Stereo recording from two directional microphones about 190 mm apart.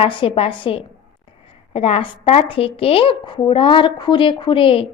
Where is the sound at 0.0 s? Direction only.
25° left (ahead or behind).